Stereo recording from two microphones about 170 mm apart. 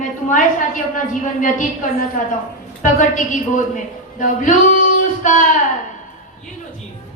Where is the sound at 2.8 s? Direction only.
50° left (ahead or behind).